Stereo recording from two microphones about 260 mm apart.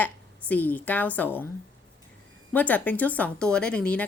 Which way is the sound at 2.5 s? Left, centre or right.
Centre.